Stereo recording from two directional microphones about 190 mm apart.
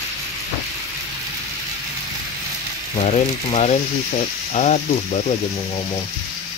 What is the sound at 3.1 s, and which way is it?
Speech, 35° left (ahead or behind).